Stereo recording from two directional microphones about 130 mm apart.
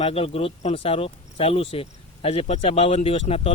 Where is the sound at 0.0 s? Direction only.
50° left (ahead or behind).